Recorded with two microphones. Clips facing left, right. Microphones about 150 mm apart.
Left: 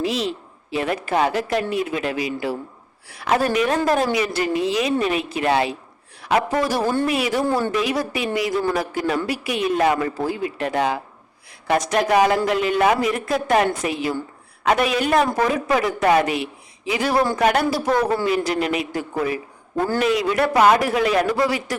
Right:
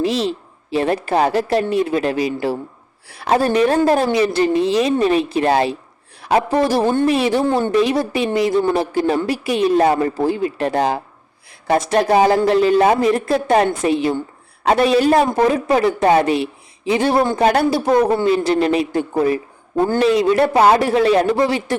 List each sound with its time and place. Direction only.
0.0 s a woman's voice: 30° right (ahead or behind)